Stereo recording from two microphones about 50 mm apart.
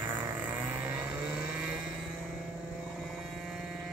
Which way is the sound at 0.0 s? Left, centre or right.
Right.